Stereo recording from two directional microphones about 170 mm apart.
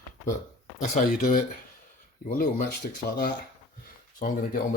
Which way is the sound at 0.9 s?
55° left (ahead or behind).